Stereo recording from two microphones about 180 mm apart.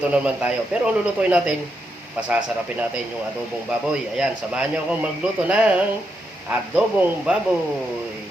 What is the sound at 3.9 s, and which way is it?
A man's voice, 5° right (ahead or behind).